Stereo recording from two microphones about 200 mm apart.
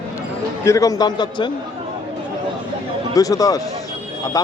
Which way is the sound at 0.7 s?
15° left (ahead or behind).